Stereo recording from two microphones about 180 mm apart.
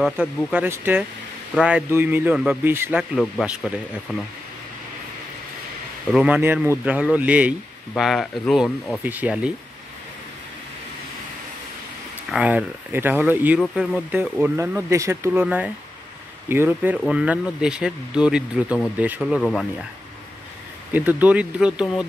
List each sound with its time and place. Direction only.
0.2 s speech: 10° right (ahead or behind)
3.0 s speech: centre (ahead or behind)
6.1 s speech: 10° right (ahead or behind)
9.0 s speech: 10° right (ahead or behind)
12.3 s speech: 5° right (ahead or behind)
20.9 s speech: 10° right (ahead or behind)